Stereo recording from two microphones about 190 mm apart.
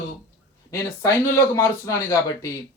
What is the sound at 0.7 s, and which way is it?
Speech, 15° left (ahead or behind).